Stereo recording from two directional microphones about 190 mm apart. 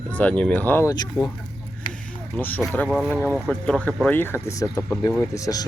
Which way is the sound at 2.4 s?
10° left (ahead or behind).